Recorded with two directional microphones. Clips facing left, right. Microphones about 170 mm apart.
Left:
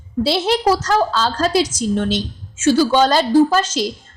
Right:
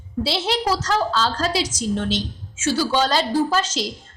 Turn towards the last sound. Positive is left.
turn(degrees=50)  # may be behind; listen again after turning